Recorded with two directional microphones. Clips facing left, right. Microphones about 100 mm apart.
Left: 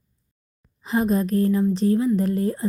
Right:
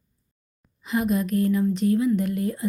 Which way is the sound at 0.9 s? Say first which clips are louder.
Left 2 dB; 35° left (ahead or behind).